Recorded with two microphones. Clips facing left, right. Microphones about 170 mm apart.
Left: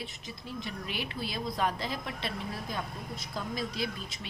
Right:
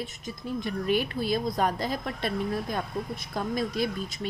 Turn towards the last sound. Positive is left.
turn(degrees=-45)  # may be behind; listen again after turning